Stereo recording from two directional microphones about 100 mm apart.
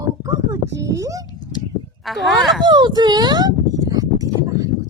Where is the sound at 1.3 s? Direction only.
45° left (ahead or behind).